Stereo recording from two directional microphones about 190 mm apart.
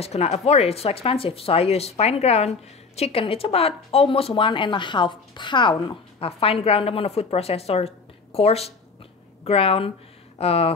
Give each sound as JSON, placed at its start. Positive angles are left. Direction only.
{"t": 0.0, "sound": "speech", "side_deg": 35}